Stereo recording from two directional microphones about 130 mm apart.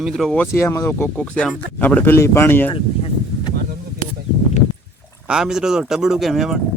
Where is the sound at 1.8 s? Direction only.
15° left (ahead or behind).